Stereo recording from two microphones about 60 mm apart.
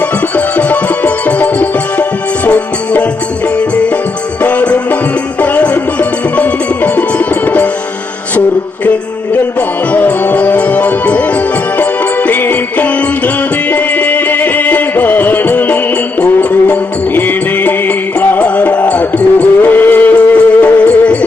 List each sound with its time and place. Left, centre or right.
0.3 s music: left
4.4 s music: left
9.3 s music: left